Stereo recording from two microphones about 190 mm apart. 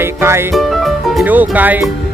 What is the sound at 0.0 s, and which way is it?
Speech, 15° right (ahead or behind).